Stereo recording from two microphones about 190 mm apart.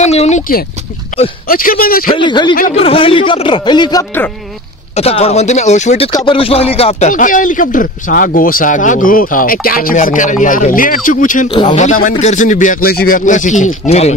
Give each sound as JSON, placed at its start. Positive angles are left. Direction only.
{"t": 0.0, "sound": "speech", "side_deg": 35}
{"t": 1.5, "sound": "speech", "side_deg": 50}
{"t": 2.1, "sound": "speech", "side_deg": 25}
{"t": 6.1, "sound": "speech", "side_deg": 25}